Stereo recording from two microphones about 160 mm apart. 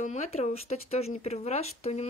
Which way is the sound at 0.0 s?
45° left (ahead or behind).